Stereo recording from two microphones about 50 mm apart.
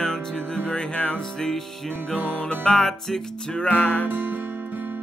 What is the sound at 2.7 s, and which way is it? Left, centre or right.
Music, centre.